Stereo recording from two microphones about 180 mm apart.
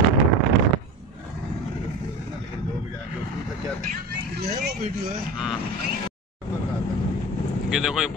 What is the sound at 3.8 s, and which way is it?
Vehicle, 60° right (ahead or behind).